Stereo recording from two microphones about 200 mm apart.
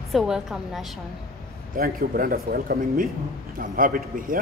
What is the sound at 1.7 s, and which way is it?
Speech, 45° right (ahead or behind).